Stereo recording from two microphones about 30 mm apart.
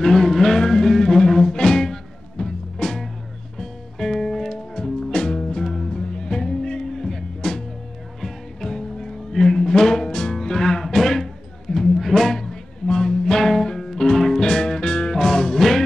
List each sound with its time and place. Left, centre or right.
0.0 s music: centre
7.0 s music: centre
8.5 s music: centre
15.1 s music: centre